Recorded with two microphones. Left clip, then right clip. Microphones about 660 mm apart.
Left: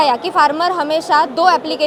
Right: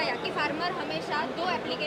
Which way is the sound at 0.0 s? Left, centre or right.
Left.